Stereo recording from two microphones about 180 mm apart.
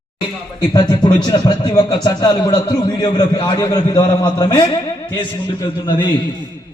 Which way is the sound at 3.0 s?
25° left (ahead or behind).